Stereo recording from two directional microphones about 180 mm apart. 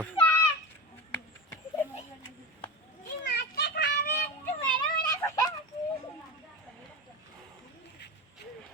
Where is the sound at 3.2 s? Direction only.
65° left (ahead or behind).